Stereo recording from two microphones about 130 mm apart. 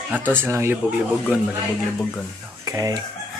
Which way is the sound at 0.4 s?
20° right (ahead or behind).